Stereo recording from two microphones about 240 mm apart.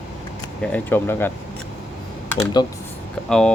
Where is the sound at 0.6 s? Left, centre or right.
Centre.